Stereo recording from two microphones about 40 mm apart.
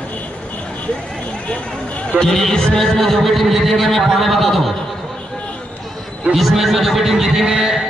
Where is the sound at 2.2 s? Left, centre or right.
Centre.